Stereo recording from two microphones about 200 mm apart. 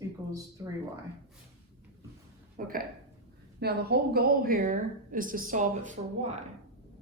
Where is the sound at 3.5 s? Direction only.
55° right (ahead or behind); by 6.3 s 40° right (ahead or behind).